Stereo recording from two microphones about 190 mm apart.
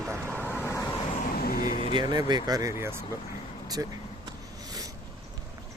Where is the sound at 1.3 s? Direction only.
50° left (ahead or behind).